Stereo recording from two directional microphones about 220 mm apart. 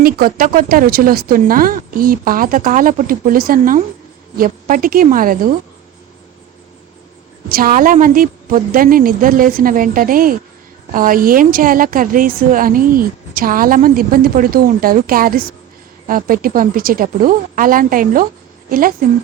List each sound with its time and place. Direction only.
0.0 s a woman's voice: 40° right (ahead or behind)
7.5 s a woman's voice: 40° right (ahead or behind)